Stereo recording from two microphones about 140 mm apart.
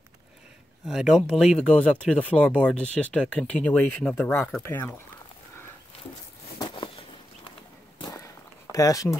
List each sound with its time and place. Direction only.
0.8 s speech: 5° right (ahead or behind); by 5.0 s 15° left (ahead or behind)
6.6 s a sound: 35° left (ahead or behind)
8.0 s walk: 25° left (ahead or behind)
8.7 s speech: 25° left (ahead or behind)